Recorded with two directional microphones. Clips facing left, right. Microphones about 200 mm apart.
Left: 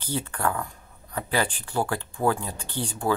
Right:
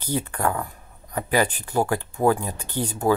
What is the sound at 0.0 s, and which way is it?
Speech, 10° right (ahead or behind).